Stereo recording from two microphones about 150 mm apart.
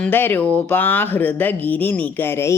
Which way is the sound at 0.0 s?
15° left (ahead or behind).